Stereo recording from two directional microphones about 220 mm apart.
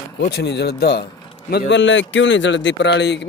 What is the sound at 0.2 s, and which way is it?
A man's voice, 50° left (ahead or behind).